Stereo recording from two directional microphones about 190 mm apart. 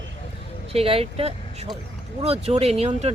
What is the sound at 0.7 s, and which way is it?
Speech, 30° right (ahead or behind).